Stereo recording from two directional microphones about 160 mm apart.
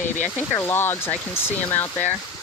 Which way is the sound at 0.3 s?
15° left (ahead or behind).